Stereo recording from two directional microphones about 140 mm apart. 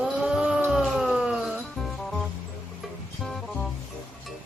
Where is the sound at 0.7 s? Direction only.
5° right (ahead or behind).